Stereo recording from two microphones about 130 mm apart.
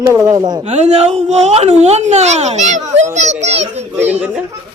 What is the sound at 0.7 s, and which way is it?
Speech, 55° right (ahead or behind).